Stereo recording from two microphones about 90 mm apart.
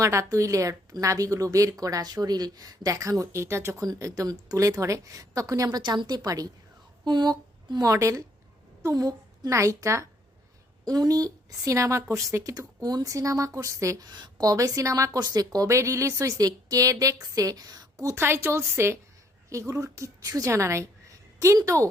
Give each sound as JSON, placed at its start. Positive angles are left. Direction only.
{"t": 0.0, "sound": "a woman's voice", "side_deg": -35}
{"t": 5.6, "sound": "a woman's voice", "side_deg": -55}
{"t": 14.1, "sound": "a woman's voice", "side_deg": -50}
{"t": 14.5, "sound": "a woman's voice", "side_deg": -40}